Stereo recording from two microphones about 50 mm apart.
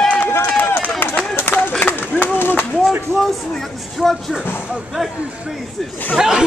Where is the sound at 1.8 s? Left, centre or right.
Left.